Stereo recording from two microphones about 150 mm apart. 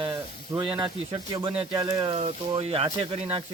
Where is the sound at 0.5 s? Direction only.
20° right (ahead or behind).